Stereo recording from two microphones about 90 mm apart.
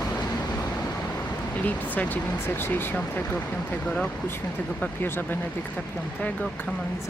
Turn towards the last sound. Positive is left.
turn(degrees=25)  # may be behind; listen again after turning